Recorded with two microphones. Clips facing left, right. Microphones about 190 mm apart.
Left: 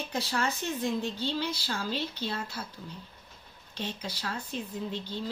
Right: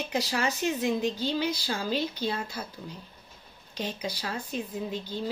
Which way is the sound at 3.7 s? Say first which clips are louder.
Right 4 dB; 10° right (ahead or behind).